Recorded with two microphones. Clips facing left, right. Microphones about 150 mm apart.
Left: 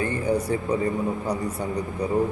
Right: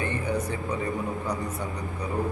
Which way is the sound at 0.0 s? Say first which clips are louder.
Left 4 dB; 35° left (ahead or behind).